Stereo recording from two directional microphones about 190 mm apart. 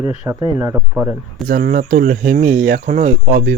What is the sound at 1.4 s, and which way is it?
Speech, 45° right (ahead or behind).